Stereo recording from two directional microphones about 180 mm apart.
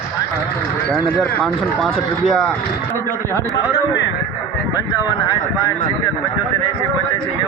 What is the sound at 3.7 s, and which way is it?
Speech, 75° left (ahead or behind).